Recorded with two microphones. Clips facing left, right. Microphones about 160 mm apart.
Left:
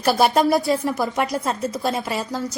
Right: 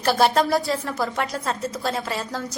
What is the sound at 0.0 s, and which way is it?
Speech, 10° left (ahead or behind).